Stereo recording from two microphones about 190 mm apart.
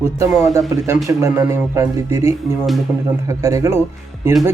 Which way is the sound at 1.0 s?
15° right (ahead or behind).